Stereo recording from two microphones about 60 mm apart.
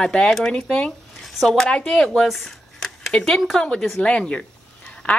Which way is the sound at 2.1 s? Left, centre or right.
Centre.